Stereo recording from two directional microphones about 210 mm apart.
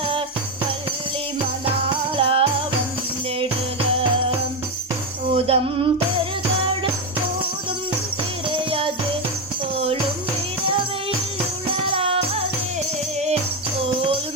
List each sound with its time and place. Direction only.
1.6 s music: 25° right (ahead or behind)
5.3 s music: 30° right (ahead or behind)
8.4 s music: 25° right (ahead or behind)
11.9 s music: 30° right (ahead or behind)